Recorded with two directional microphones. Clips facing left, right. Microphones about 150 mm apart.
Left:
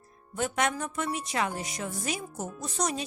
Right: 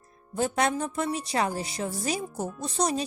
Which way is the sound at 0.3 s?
35° right (ahead or behind).